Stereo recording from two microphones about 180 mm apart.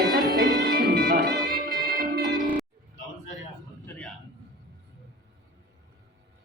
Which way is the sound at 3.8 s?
10° left (ahead or behind).